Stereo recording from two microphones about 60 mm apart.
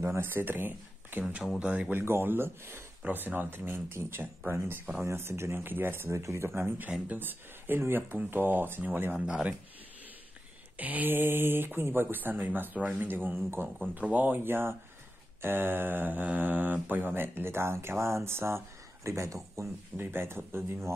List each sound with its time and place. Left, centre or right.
0.0 s speech: right
1.6 s speech: right
2.0 s speech: right
9.2 s speech: centre
10.8 s speech: right
13.9 s speech: right
20.0 s speech: right